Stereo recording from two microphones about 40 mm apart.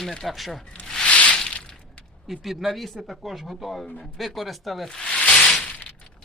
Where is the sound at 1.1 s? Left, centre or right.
Left.